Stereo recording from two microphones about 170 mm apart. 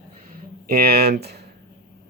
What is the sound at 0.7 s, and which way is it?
Speech, 60° right (ahead or behind).